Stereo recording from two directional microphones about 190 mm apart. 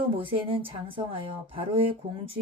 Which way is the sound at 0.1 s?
30° right (ahead or behind).